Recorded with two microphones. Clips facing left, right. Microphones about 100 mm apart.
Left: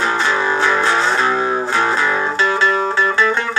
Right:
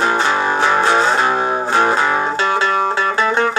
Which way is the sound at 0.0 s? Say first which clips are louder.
Right 2 dB; 50° right (ahead or behind).